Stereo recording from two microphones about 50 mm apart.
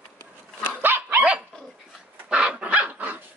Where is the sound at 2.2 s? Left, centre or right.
Centre.